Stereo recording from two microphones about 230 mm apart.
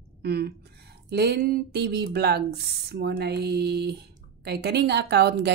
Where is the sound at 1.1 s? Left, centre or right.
Right.